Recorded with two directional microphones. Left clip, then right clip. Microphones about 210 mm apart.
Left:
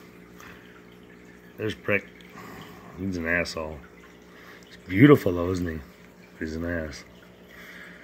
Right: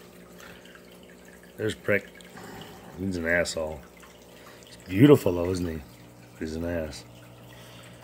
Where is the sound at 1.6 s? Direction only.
Centre (ahead or behind).